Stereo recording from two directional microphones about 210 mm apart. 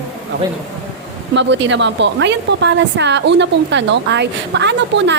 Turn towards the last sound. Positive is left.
turn(degrees=-55)  # may be behind; listen again after turning